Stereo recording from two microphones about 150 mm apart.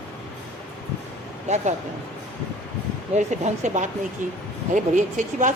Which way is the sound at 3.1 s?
50° right (ahead or behind).